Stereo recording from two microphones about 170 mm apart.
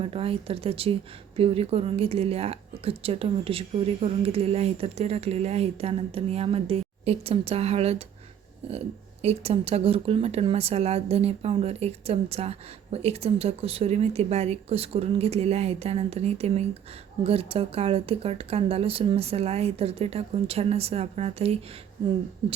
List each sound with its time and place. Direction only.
0.0 s speech: 35° right (ahead or behind)